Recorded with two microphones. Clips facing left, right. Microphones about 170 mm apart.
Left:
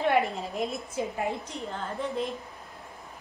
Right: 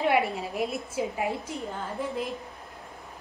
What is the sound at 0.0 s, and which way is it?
A woman's voice, 5° right (ahead or behind).